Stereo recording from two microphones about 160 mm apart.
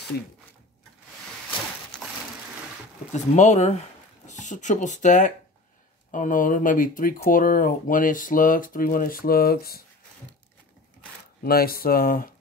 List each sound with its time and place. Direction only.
3.1 s speech: 45° left (ahead or behind); by 9.8 s 75° left (ahead or behind)
11.4 s speech: 70° left (ahead or behind)